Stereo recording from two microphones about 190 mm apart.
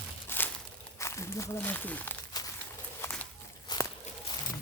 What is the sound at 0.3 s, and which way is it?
Crumpling, 10° left (ahead or behind).